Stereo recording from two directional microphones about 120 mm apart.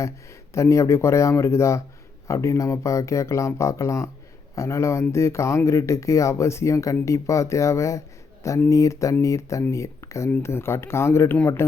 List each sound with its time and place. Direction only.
0.5 s speech: 25° left (ahead or behind)